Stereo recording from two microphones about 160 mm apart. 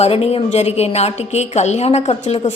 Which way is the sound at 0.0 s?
40° left (ahead or behind).